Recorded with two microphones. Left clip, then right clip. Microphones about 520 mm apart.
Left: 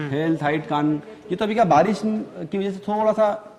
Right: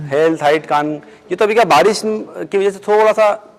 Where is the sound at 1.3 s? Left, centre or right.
Right.